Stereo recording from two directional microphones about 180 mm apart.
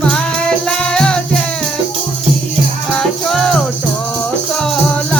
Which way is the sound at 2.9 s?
Centre (ahead or behind).